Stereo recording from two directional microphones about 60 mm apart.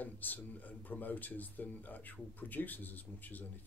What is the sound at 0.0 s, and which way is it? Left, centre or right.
Speech, left.